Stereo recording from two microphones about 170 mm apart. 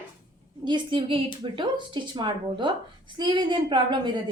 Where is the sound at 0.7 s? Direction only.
30° right (ahead or behind).